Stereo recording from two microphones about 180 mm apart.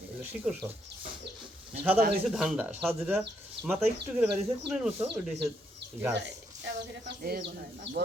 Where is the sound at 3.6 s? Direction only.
70° right (ahead or behind).